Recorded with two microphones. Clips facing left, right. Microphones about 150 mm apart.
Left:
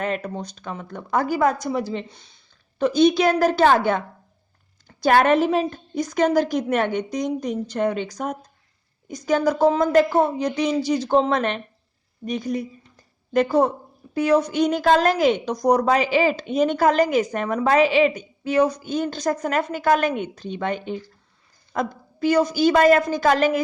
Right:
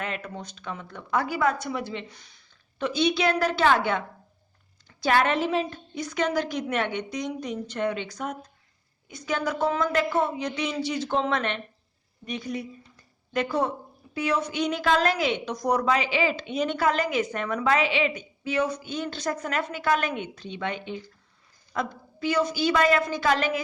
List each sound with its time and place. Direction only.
0.0 s a woman's voice: 40° left (ahead or behind)
2.0 s speech: 25° left (ahead or behind)
2.7 s a woman's voice: 40° left (ahead or behind)